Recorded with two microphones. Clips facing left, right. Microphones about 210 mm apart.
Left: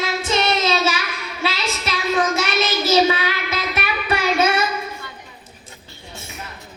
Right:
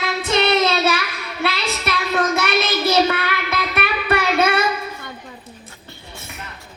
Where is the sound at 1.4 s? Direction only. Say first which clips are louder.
Right 2 dB; 60° right (ahead or behind).